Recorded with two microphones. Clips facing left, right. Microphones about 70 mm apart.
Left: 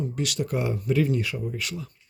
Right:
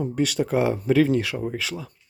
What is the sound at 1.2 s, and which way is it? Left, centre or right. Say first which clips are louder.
Speech: right 3 dB; right.